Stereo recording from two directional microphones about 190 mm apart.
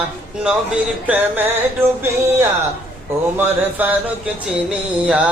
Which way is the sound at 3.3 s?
10° right (ahead or behind).